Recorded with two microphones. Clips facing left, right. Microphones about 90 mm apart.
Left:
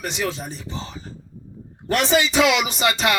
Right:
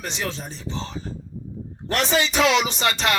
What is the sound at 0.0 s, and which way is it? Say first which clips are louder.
Speech: left 4 dB; 35° right (ahead or behind).